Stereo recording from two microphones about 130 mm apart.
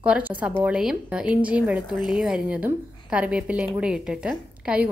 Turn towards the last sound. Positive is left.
turn(degrees=-10)  # may be behind; listen again after turning